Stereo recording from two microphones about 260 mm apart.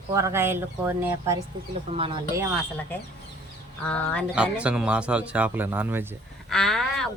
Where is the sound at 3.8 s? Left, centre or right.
Centre.